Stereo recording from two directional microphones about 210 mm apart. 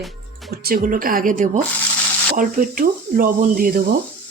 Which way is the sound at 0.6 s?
40° right (ahead or behind).